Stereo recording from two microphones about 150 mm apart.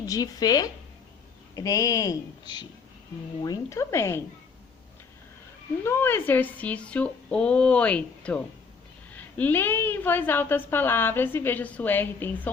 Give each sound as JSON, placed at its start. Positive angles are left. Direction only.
{"t": 0.0, "sound": "speech", "side_deg": 25}
{"t": 5.8, "sound": "a woman's voice", "side_deg": 15}